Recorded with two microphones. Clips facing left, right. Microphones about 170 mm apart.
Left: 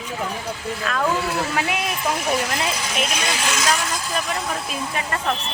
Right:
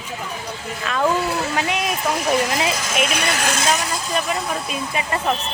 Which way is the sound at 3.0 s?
60° right (ahead or behind).